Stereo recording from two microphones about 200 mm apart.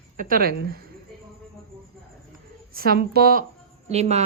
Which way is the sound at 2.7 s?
50° right (ahead or behind).